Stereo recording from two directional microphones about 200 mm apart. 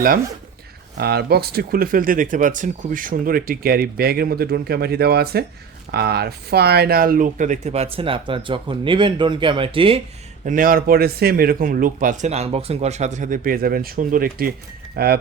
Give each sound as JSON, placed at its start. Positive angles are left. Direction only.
{"t": 0.9, "sound": "speech", "side_deg": -50}
{"t": 10.4, "sound": "speech", "side_deg": -45}